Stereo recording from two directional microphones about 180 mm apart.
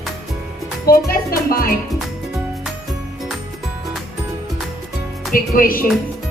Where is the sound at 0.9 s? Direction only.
55° left (ahead or behind).